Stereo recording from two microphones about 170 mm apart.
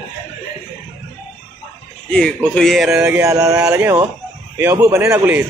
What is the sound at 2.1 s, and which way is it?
Speech, 5° left (ahead or behind).